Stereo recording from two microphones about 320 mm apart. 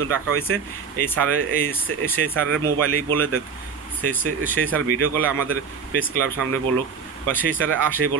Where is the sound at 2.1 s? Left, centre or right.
Right.